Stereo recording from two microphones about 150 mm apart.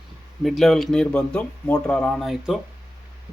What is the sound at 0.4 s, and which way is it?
A man's voice, centre (ahead or behind).